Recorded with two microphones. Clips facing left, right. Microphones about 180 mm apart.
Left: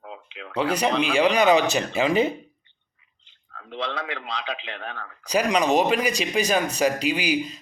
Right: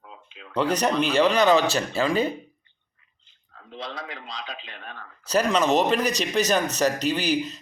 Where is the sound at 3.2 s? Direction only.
80° left.